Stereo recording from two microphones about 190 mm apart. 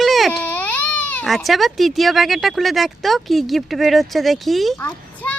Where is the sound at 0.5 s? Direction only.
10° left (ahead or behind).